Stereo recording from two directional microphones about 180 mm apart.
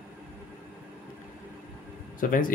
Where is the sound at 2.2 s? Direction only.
50° left (ahead or behind).